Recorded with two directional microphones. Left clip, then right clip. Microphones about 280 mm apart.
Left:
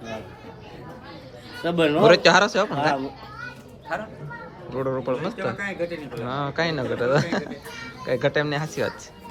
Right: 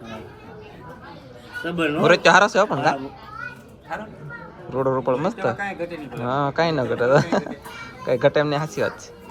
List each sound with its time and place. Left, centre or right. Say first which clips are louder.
1.6 s speech: left 3 dB; left
2.0 s speech: right 2 dB; centre
4.7 s speech: right 5 dB; centre